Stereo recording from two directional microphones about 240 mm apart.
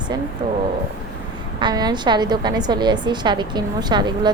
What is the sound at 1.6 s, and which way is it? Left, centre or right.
A woman's voice, centre.